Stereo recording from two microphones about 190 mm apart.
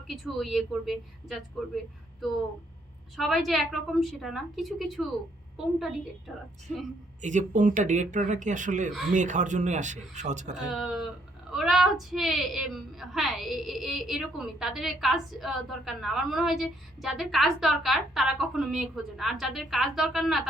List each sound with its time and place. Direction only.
0.3 s a woman's voice: centre (ahead or behind)
7.2 s speech: 40° right (ahead or behind)
10.6 s a woman's voice: 5° right (ahead or behind)